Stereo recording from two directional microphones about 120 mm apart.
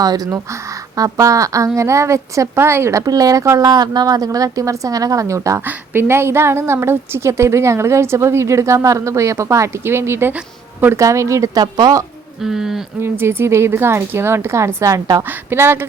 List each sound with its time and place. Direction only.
0.9 s a woman's voice: 30° right (ahead or behind)
12.4 s speech: 5° right (ahead or behind)
13.0 s a woman's voice: 20° right (ahead or behind)
15.4 s a woman's voice: 20° right (ahead or behind)